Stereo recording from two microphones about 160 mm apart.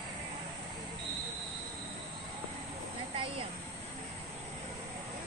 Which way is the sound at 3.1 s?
35° right (ahead or behind).